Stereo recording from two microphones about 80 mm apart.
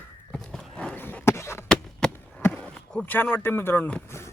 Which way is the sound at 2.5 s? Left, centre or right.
Centre.